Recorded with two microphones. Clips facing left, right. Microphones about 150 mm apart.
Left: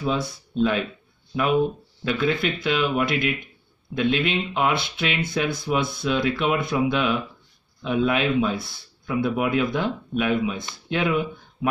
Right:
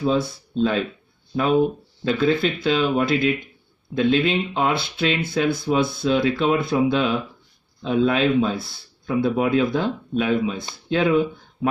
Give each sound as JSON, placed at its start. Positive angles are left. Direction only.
{"t": 0.3, "sound": "speech", "side_deg": -30}
{"t": 2.0, "sound": "speech", "side_deg": -30}